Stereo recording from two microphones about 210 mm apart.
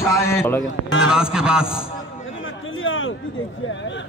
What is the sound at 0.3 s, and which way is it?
Speech, 10° left (ahead or behind).